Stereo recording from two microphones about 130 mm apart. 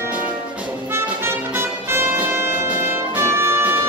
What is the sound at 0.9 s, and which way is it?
Music, 20° right (ahead or behind).